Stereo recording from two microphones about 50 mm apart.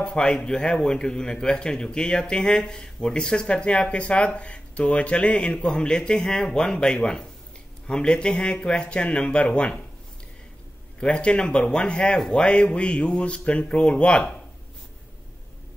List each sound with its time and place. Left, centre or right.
0.0 s a man's voice: left
11.0 s speech: left